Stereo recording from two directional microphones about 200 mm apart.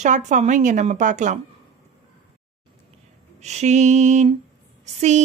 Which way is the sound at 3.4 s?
35° right (ahead or behind).